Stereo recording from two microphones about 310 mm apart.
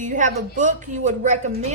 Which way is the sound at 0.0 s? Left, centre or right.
Right.